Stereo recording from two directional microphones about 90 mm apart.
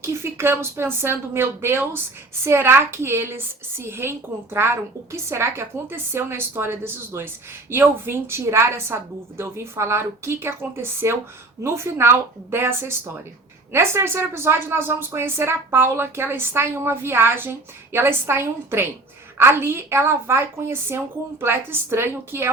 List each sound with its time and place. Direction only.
0.0 s speech: 30° right (ahead or behind)